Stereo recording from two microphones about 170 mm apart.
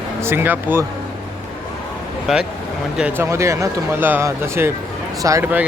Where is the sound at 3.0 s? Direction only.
15° right (ahead or behind).